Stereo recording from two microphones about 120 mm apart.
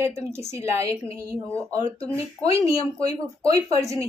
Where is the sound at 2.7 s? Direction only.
55° left (ahead or behind).